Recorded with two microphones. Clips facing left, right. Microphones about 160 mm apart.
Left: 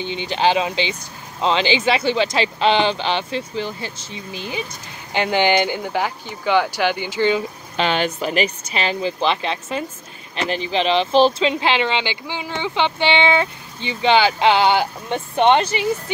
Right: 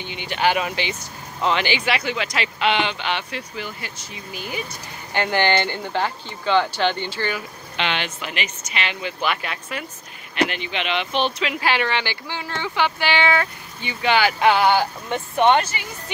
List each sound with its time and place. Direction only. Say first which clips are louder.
0.0 s speech: left 3 dB; 25° left (ahead or behind)
5.1 s speech: left 3 dB; 15° left (ahead or behind)
7.7 s speech: left 6 dB; 40° left (ahead or behind); by 15.9 s 25° left (ahead or behind)